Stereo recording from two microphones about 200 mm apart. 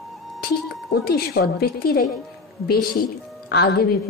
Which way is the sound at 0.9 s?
50° left (ahead or behind).